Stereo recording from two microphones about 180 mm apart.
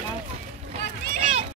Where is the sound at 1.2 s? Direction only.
35° right (ahead or behind).